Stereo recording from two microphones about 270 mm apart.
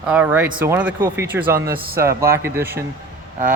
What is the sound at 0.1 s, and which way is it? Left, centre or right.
Speech, centre.